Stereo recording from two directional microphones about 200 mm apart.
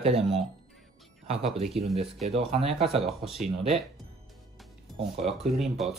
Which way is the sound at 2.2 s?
30° right (ahead or behind).